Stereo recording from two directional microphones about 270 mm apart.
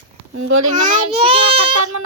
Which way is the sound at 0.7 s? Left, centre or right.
Right.